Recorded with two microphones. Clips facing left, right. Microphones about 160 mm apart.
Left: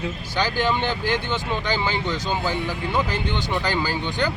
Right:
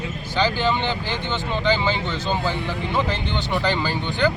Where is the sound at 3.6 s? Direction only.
10° left (ahead or behind).